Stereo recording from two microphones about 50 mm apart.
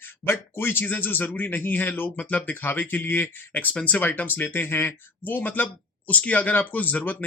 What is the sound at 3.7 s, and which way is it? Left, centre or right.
Speech, left.